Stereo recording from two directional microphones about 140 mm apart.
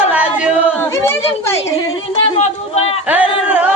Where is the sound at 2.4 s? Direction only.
50° left (ahead or behind).